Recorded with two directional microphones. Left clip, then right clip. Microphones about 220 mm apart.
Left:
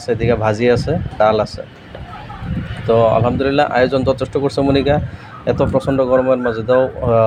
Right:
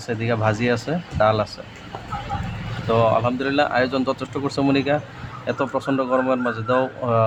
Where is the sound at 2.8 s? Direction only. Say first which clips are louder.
Left 6 dB; 10° left (ahead or behind).